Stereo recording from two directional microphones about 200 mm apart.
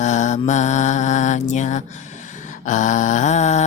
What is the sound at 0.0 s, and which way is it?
Mantra, 35° left (ahead or behind).